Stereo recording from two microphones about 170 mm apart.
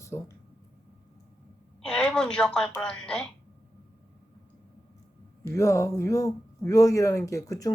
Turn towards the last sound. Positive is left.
turn(degrees=20)  # may be behind; listen again after turning